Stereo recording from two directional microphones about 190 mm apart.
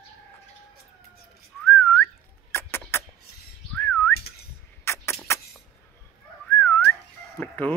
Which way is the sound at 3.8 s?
10° left (ahead or behind).